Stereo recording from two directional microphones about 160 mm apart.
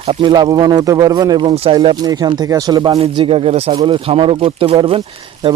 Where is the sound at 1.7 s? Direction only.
30° right (ahead or behind).